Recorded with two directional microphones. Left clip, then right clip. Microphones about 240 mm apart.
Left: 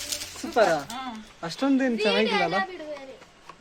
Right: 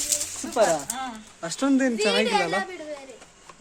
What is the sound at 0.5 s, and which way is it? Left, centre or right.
Speech, centre.